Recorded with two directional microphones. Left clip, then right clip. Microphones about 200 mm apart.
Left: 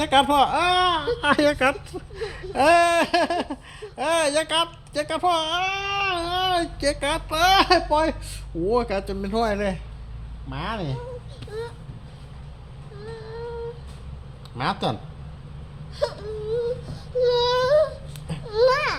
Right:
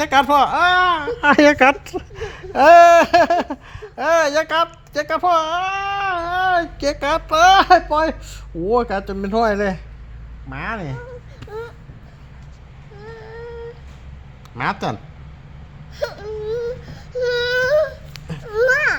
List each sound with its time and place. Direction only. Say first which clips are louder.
0.0 s a woman's voice: right 4 dB; 20° right (ahead or behind); by 1.7 s 35° right (ahead or behind)
1.8 s a sound: right 4 dB; 35° right (ahead or behind); by 6.8 s 15° right (ahead or behind)
6.8 s a woman's voice: right 5 dB; 30° right (ahead or behind)
14.6 s a woman's voice: right 3 dB; 25° right (ahead or behind)
16.0 s wail: right 2 dB; centre (ahead or behind)
16.6 s a sound: right 1 dB; 15° right (ahead or behind)